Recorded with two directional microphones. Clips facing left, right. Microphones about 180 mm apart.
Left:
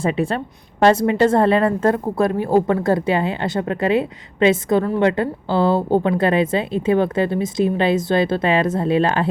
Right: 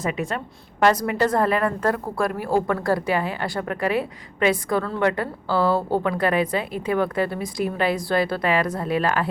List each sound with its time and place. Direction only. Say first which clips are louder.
0.0 s a woman's voice: left 6 dB; 30° left (ahead or behind)